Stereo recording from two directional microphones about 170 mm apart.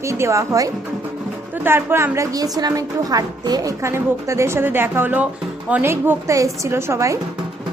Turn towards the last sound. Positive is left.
turn(degrees=-15)  # may be behind; listen again after turning